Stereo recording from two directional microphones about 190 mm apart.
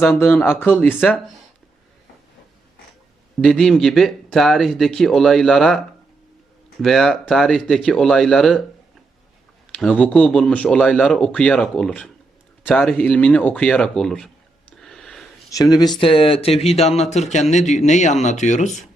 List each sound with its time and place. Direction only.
0.2 s speech: 10° left (ahead or behind)
0.9 s speech: 5° right (ahead or behind)
3.4 s speech: centre (ahead or behind)
6.8 s speech: centre (ahead or behind)
9.7 s speech: 5° left (ahead or behind)
14.8 s a sound: centre (ahead or behind)
15.4 s speech: 20° left (ahead or behind); by 18.9 s 40° left (ahead or behind)